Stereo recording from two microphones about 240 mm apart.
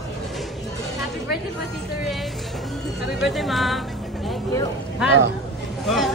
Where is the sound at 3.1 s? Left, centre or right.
Centre.